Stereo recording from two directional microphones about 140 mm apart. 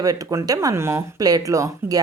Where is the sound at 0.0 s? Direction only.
25° right (ahead or behind).